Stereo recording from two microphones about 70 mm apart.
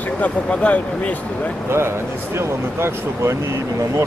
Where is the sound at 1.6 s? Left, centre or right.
Right.